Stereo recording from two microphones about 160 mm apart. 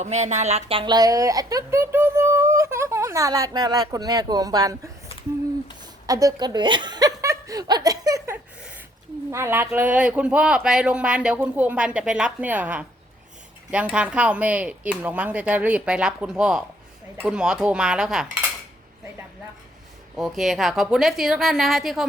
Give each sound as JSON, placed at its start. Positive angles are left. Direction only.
{"t": 0.0, "sound": "a woman's voice", "side_deg": -45}
{"t": 6.1, "sound": "chuckle", "side_deg": -20}
{"t": 9.3, "sound": "speech", "side_deg": -15}
{"t": 13.9, "sound": "a woman's voice", "side_deg": -5}
{"t": 20.1, "sound": "a woman's voice", "side_deg": 0}